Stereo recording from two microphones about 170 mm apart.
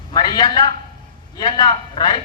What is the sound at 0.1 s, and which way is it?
A man's voice, 25° left (ahead or behind).